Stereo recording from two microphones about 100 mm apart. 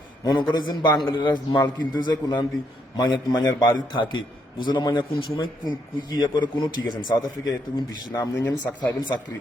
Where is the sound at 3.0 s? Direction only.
45° left (ahead or behind).